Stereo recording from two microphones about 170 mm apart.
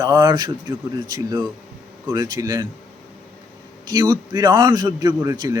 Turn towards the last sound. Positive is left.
turn(degrees=-20)  # may be behind; listen again after turning